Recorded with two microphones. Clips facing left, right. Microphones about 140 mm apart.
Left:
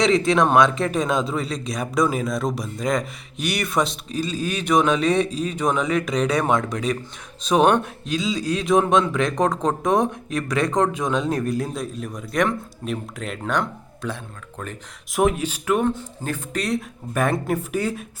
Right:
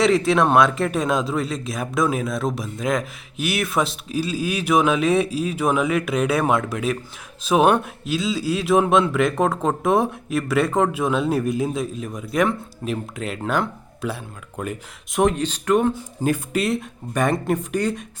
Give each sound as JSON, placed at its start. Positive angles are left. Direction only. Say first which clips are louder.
{"t": 0.0, "sound": "a man's voice", "louder": "right 1 dB", "side_deg": 0}
{"t": 16.0, "sound": "a man's voice", "louder": "right 7 dB", "side_deg": -10}